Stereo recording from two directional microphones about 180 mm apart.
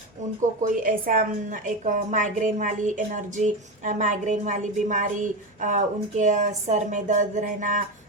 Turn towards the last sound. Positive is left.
turn(degrees=-45)  # may be behind; listen again after turning